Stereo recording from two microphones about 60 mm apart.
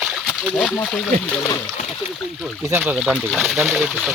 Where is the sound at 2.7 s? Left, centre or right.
Right.